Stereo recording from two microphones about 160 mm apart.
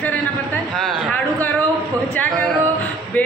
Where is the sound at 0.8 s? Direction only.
5° left (ahead or behind).